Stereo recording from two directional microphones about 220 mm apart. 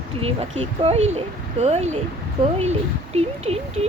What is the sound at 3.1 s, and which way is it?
Speech, 25° right (ahead or behind).